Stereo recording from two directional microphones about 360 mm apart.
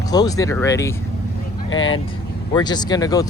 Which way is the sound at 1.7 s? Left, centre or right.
Left.